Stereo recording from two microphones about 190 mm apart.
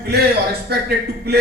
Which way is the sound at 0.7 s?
55° right (ahead or behind).